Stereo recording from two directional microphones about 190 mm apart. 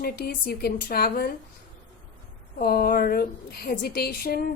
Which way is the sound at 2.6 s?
50° left (ahead or behind).